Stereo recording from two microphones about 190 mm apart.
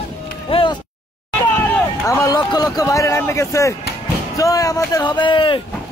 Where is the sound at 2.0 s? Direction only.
20° left (ahead or behind).